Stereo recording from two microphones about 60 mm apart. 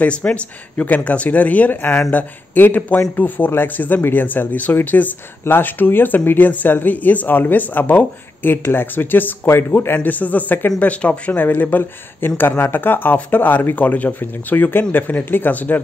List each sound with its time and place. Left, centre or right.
0.0 s speech: left
9.9 s speech: left